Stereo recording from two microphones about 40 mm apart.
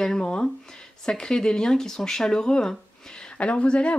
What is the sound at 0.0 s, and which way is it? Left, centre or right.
Speech, centre.